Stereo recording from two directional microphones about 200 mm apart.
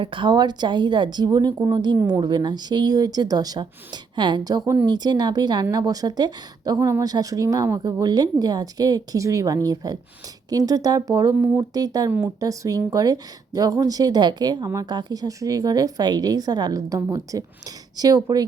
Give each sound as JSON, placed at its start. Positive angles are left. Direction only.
{"t": 0.0, "sound": "a woman's voice", "side_deg": -25}